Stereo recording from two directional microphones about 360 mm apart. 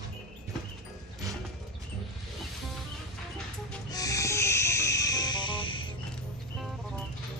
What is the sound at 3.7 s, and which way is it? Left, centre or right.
Owl, centre.